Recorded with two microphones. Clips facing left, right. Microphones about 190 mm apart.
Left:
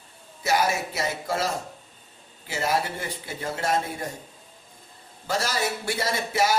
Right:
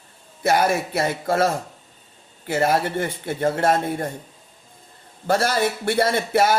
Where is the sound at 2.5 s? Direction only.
55° right (ahead or behind).